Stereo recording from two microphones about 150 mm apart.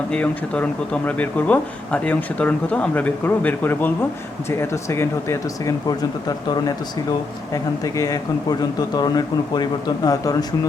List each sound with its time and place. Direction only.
0.1 s speech: 10° left (ahead or behind); by 10.3 s 25° left (ahead or behind)